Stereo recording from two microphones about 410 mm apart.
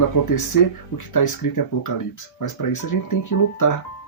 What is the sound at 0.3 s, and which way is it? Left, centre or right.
Speech, left.